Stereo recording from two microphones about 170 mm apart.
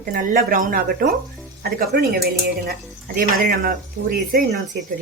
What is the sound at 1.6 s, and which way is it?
Speech, 65° right (ahead or behind).